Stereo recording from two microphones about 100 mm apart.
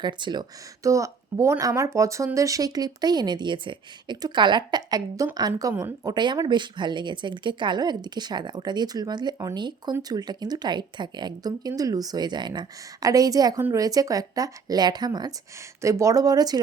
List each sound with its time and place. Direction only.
0.0 s speech: 50° right (ahead or behind)
0.8 s speech: 30° right (ahead or behind)
15.8 s speech: 30° right (ahead or behind)